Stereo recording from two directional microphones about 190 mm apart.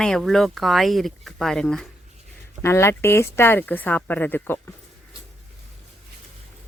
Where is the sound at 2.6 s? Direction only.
15° left (ahead or behind).